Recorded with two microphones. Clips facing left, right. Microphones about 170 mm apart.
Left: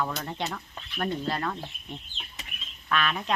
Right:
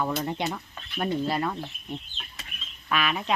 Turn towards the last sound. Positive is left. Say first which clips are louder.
# right 1 dB
turn(degrees=-5)  # may be behind; listen again after turning